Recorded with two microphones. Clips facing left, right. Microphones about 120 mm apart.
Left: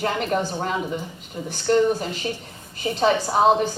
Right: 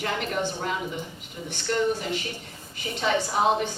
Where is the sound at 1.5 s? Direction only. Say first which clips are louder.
Left 6 dB; 35° left (ahead or behind).